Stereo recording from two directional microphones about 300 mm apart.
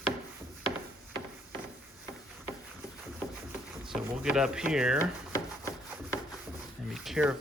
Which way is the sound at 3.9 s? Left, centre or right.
Centre.